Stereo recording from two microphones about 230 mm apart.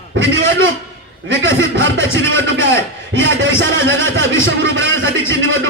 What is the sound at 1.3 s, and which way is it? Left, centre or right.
Music, right.